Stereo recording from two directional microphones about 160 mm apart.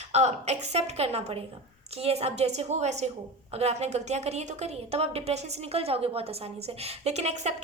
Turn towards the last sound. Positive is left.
turn(degrees=-45)  # may be behind; listen again after turning